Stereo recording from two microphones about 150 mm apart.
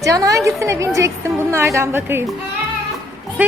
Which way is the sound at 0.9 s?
20° right (ahead or behind).